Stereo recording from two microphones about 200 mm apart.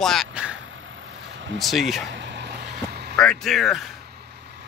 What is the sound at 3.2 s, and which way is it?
Speech, 5° left (ahead or behind).